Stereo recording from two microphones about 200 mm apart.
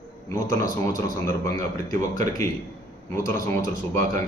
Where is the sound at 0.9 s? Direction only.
15° left (ahead or behind).